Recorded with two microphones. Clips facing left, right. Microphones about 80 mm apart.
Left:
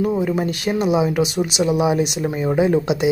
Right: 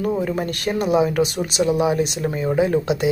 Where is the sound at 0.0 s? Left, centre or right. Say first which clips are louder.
Left 2 dB; centre.